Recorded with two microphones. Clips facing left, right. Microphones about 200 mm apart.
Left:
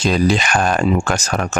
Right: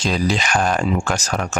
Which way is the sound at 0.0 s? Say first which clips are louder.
Left 4 dB; 55° left (ahead or behind).